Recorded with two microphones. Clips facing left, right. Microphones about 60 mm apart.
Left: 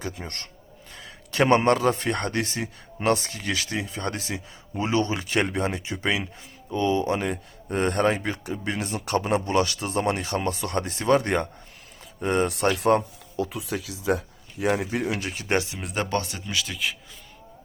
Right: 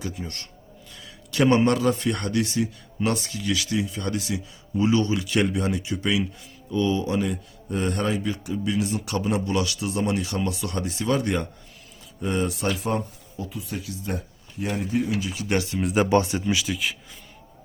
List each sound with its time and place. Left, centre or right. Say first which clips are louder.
0.0 s a man's voice: right 1 dB; left
15.4 s a man's voice: left 1 dB; left
15.7 s speech: right 7 dB; centre
16.0 s speech: right 7 dB; right
16.6 s speech: right 2 dB; centre